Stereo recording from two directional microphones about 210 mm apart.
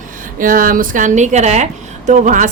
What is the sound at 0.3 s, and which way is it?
A woman's voice, 40° right (ahead or behind).